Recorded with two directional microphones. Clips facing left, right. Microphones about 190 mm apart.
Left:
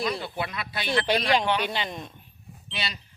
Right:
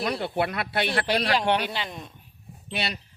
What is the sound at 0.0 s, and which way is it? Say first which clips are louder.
Speech: right 3 dB; 65° right (ahead or behind).